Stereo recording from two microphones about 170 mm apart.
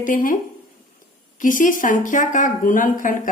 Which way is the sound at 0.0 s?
55° left (ahead or behind).